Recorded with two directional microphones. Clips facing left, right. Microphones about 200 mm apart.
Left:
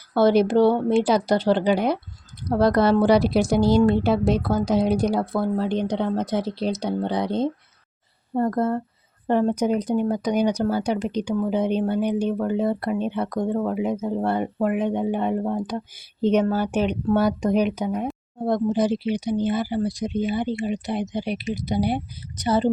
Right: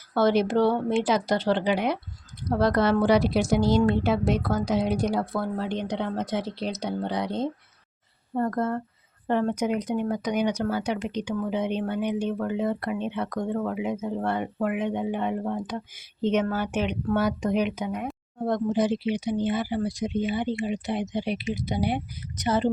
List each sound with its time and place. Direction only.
0.1 s speech: 35° left (ahead or behind)